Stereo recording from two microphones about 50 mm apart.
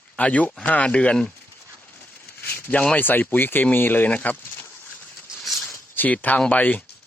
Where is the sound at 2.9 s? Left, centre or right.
Left.